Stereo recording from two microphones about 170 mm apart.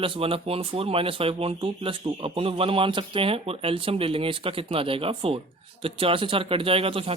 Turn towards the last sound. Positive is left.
turn(degrees=-35)  # may be behind; listen again after turning